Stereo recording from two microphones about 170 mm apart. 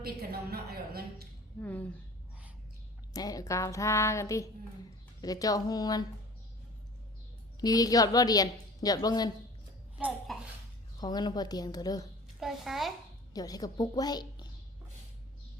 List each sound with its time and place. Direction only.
0.0 s a woman's voice: 65° right (ahead or behind)
1.6 s a sound: 10° left (ahead or behind)
3.1 s a sound: 20° left (ahead or behind)
5.2 s a woman's voice: 20° left (ahead or behind)
7.6 s a woman's voice: 20° left (ahead or behind)
10.3 s a sound: centre (ahead or behind)
11.0 s a woman's voice: 25° left (ahead or behind)
12.4 s a child's voice: centre (ahead or behind)
13.3 s a woman's voice: 20° left (ahead or behind)